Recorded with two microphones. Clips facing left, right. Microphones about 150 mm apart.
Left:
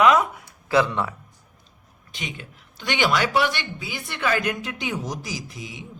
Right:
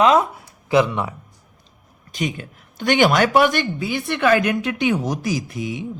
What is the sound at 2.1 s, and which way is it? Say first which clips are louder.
Speech: right 10 dB; 45° right (ahead or behind).